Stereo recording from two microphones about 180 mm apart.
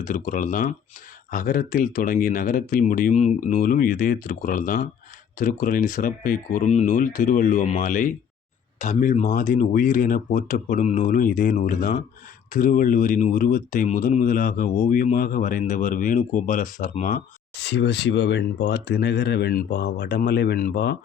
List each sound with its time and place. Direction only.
0.0 s speech: 50° left (ahead or behind)
17.6 s speech: 75° left (ahead or behind); by 20.9 s 60° left (ahead or behind)